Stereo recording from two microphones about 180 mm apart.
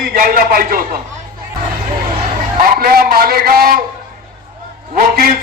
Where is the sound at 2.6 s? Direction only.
55° right (ahead or behind).